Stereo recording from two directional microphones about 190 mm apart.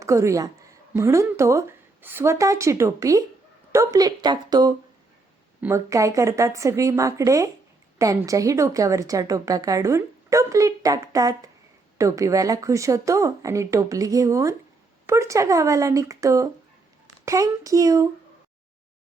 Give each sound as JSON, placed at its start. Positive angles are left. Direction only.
{"t": 0.0, "sound": "a woman's voice", "side_deg": -15}